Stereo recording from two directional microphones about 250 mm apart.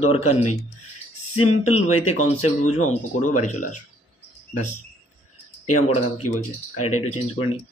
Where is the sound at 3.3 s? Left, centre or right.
Left.